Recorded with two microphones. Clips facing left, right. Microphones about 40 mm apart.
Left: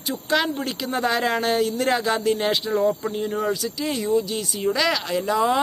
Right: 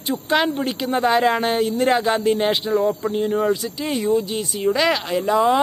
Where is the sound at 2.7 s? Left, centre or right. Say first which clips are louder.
Right 2 dB; centre.